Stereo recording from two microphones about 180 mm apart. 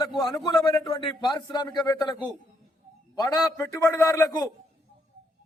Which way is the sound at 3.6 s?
15° left (ahead or behind).